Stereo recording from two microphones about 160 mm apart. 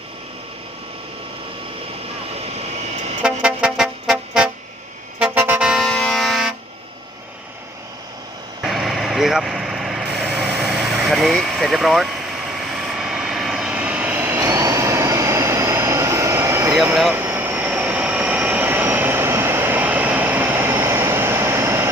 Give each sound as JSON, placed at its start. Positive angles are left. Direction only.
{"t": 2.6, "sound": "vehicle", "side_deg": -45}
{"t": 3.2, "sound": "music", "side_deg": -5}
{"t": 5.2, "sound": "vehicle", "side_deg": -10}
{"t": 8.6, "sound": "vehicle", "side_deg": 0}